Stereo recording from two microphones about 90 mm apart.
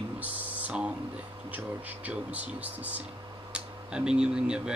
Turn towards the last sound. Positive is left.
turn(degrees=-10)  # may be behind; listen again after turning